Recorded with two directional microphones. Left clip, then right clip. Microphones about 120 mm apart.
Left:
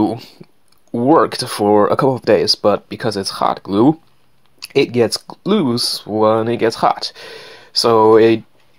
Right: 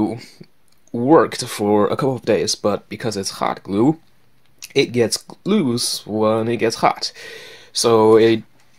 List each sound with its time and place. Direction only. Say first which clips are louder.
0.9 s speech: left 1 dB; 20° left (ahead or behind)